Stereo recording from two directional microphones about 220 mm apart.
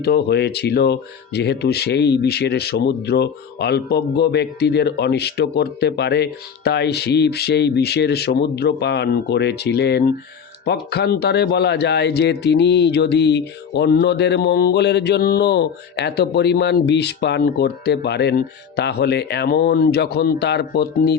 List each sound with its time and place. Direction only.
0.0 s a man's voice: 45° left (ahead or behind)